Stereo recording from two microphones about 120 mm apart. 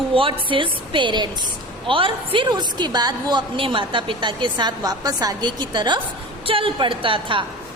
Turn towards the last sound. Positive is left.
turn(degrees=-45)  # may be behind; listen again after turning